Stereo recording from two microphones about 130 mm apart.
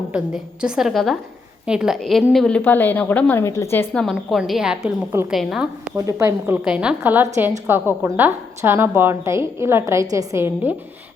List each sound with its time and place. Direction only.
0.1 s a woman's voice: 5° right (ahead or behind)
2.6 s a woman's voice: 15° left (ahead or behind)
3.9 s a woman's voice: centre (ahead or behind)
6.0 s a woman's voice: 20° right (ahead or behind)